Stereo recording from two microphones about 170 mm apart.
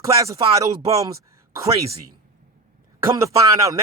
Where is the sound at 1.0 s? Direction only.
20° right (ahead or behind).